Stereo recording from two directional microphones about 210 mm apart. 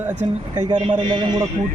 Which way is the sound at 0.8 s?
25° right (ahead or behind).